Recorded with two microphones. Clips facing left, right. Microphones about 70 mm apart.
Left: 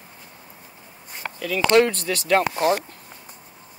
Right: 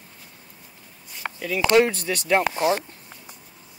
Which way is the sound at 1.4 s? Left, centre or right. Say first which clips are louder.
Left 1 dB; centre.